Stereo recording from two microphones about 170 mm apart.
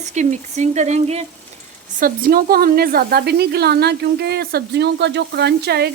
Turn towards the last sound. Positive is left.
turn(degrees=-70)  # may be behind; listen again after turning